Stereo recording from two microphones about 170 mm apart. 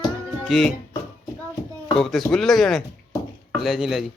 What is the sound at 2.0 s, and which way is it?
Speech, centre (ahead or behind).